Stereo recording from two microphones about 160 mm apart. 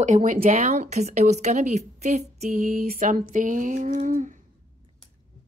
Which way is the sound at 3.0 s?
55° right (ahead or behind).